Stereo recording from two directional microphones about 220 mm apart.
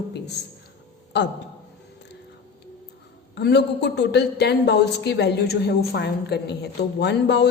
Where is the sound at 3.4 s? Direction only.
50° left (ahead or behind).